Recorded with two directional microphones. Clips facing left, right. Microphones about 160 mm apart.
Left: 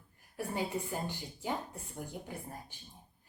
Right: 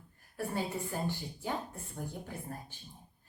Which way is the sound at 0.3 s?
15° left (ahead or behind).